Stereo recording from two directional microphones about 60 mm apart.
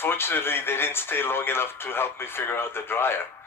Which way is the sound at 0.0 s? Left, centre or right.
Left.